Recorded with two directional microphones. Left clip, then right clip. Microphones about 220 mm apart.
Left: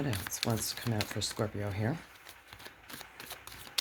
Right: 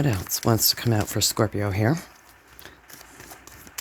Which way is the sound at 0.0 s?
55° right (ahead or behind).